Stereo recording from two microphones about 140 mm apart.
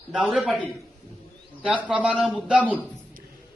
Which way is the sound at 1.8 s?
5° right (ahead or behind).